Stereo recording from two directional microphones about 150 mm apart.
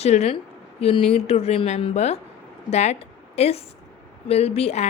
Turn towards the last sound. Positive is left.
turn(degrees=45)  # may be behind; listen again after turning